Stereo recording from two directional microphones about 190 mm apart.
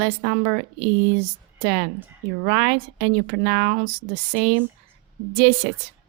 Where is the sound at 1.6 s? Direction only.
50° right (ahead or behind).